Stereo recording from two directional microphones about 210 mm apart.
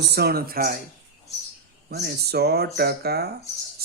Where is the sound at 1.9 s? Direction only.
50° right (ahead or behind).